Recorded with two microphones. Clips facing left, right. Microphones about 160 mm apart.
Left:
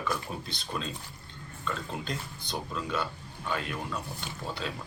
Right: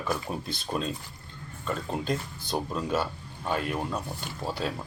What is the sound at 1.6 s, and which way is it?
Speech, 50° right (ahead or behind).